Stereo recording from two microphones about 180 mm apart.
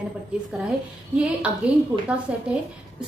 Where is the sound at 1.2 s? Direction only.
5° right (ahead or behind).